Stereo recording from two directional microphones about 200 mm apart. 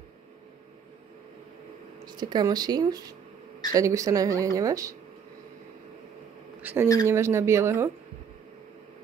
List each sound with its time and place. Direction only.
2.0 s a woman's voice: 20° right (ahead or behind)
6.6 s a woman's voice: 10° right (ahead or behind)